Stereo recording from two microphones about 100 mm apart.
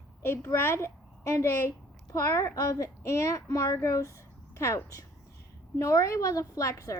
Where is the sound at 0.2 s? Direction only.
25° left (ahead or behind).